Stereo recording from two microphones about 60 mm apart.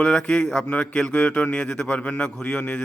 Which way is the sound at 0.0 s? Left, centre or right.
Centre.